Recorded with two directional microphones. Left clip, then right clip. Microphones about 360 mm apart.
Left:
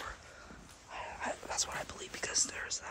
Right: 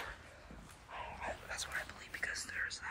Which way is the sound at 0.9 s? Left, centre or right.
Left.